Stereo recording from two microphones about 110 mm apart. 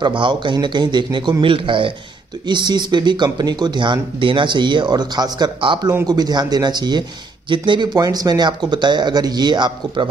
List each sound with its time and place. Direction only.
0.0 s speech: 45° right (ahead or behind)